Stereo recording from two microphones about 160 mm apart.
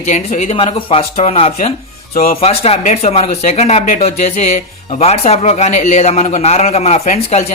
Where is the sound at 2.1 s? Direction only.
70° left (ahead or behind).